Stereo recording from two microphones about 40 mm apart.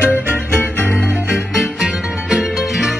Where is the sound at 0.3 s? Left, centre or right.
Left.